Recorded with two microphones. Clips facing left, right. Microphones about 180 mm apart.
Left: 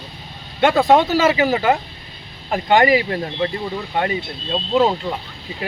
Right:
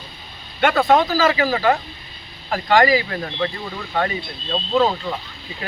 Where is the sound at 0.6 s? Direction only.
25° left (ahead or behind).